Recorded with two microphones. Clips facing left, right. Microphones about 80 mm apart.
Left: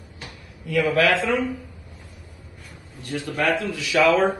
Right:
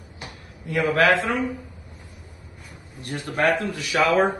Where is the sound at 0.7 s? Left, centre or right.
Right.